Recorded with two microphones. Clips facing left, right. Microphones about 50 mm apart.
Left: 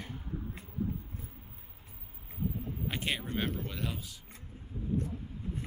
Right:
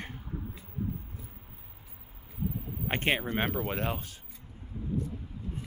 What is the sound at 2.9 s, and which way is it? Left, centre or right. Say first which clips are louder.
Speech: right 7 dB; right.